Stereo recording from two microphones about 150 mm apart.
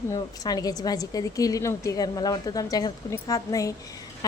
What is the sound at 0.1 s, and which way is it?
A woman's voice, 25° left (ahead or behind).